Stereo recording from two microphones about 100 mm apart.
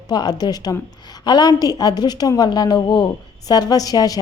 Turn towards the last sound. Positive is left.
turn(degrees=40)  # may be behind; listen again after turning